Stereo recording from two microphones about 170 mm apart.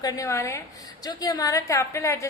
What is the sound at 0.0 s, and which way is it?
A woman's voice, 20° left (ahead or behind).